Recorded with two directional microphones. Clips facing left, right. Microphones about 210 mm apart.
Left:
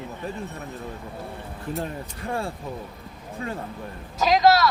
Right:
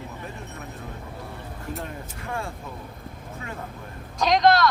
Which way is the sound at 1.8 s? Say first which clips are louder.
Left 4 dB; 35° left (ahead or behind).